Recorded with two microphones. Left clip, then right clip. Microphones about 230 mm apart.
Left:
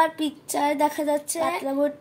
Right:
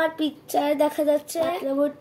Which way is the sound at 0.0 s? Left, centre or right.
Left.